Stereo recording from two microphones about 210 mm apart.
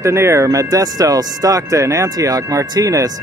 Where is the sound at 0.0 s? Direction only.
15° right (ahead or behind).